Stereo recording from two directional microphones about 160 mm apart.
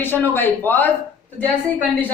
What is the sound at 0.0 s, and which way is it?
Speech, 10° left (ahead or behind).